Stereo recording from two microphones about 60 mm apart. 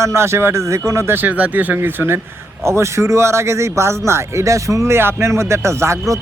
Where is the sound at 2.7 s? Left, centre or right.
Right.